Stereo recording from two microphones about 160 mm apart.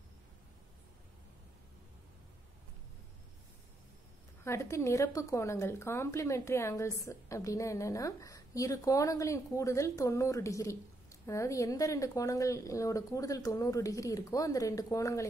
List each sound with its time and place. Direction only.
4.5 s a woman's voice: 15° left (ahead or behind)